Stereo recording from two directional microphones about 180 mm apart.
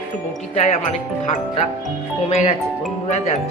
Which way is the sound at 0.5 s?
40° left (ahead or behind).